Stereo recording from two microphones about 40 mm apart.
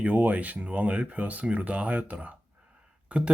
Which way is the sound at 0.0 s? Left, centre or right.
Right.